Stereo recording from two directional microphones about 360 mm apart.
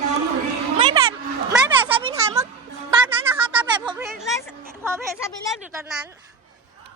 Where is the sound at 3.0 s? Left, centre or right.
Centre.